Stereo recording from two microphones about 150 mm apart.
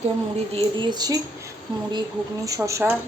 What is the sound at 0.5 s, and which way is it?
Speech, 30° right (ahead or behind).